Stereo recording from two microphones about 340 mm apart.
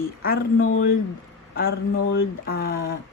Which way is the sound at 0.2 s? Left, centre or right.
Left.